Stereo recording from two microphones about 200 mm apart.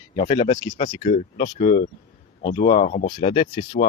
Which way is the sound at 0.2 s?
25° left (ahead or behind).